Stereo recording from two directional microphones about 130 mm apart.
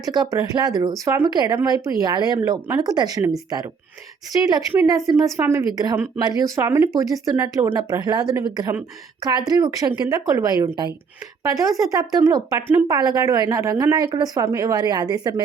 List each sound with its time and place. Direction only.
0.1 s a woman's voice: 30° right (ahead or behind)